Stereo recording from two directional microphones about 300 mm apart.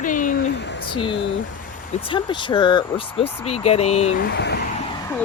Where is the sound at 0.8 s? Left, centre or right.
Centre.